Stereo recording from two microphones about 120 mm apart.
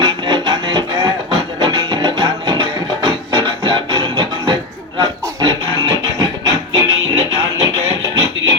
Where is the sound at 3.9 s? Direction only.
35° right (ahead or behind).